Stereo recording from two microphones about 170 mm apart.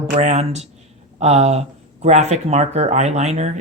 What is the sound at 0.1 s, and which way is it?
Speech, 40° right (ahead or behind).